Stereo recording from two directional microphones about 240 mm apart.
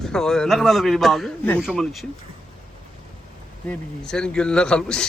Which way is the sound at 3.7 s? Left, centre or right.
Centre.